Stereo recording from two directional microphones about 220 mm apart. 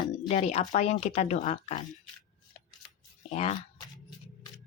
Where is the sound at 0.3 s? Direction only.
30° left (ahead or behind).